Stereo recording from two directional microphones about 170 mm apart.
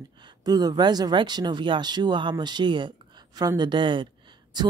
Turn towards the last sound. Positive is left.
turn(degrees=-25)  # may be behind; listen again after turning